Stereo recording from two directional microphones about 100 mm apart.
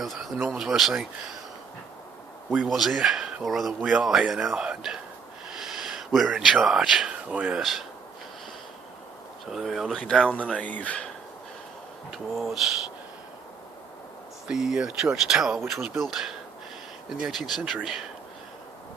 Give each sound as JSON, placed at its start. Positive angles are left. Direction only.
{"t": 0.0, "sound": "speech", "side_deg": 0}
{"t": 2.5, "sound": "speech", "side_deg": -5}
{"t": 9.5, "sound": "speech", "side_deg": 0}
{"t": 10.5, "sound": "speech", "side_deg": 15}
{"t": 12.1, "sound": "speech", "side_deg": 0}
{"t": 14.4, "sound": "speech", "side_deg": -5}